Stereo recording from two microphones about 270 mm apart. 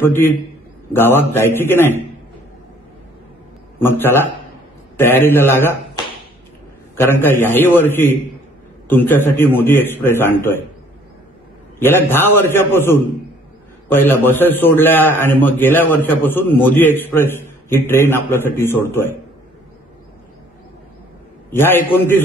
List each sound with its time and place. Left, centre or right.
0.0 s a man's voice: centre
3.8 s a man's voice: centre
7.0 s a man's voice: centre
11.8 s a man's voice: centre
21.5 s a man's voice: centre